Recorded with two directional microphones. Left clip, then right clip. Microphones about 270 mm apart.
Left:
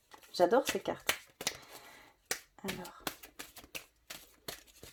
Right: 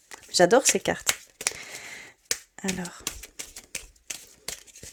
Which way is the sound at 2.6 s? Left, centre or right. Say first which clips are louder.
Right 9 dB; right.